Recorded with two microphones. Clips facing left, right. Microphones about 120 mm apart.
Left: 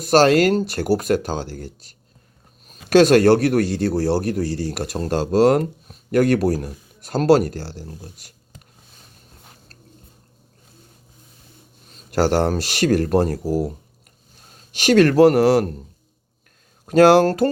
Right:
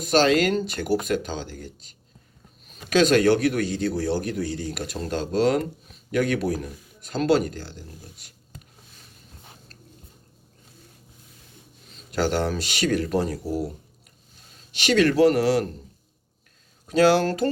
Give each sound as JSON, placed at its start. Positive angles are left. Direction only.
{"t": 0.0, "sound": "speech", "side_deg": 45}
{"t": 2.6, "sound": "speech", "side_deg": 45}
{"t": 11.9, "sound": "a sound", "side_deg": 45}
{"t": 12.5, "sound": "speech", "side_deg": 45}
{"t": 16.8, "sound": "speech", "side_deg": 50}